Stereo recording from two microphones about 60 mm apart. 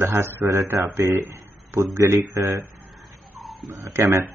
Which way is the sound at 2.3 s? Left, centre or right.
Right.